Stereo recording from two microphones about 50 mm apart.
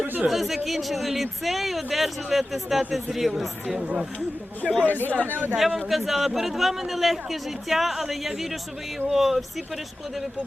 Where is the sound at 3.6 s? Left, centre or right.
Right.